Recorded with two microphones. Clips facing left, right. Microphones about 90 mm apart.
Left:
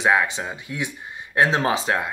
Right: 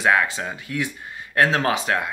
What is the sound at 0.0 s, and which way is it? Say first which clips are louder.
Speech: even; 20° left (ahead or behind).